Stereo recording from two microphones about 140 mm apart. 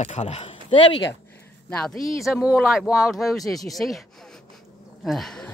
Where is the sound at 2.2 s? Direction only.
5° right (ahead or behind).